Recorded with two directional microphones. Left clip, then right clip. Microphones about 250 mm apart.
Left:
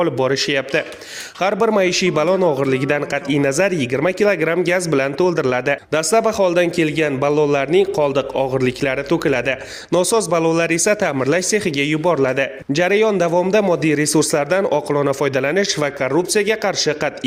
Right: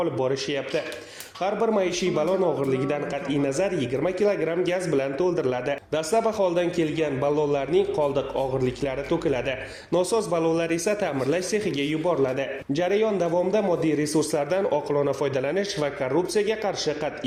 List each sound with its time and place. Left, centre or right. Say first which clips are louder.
0.0 s a man's voice: left 8 dB; left